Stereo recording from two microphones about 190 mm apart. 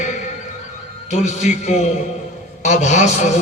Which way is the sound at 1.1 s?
35° left (ahead or behind).